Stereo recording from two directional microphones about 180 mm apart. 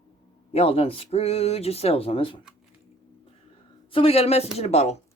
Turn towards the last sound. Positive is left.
turn(degrees=35)  # may be behind; listen again after turning